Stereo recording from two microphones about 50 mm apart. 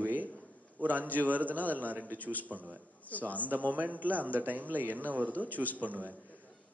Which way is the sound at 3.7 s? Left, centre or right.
Right.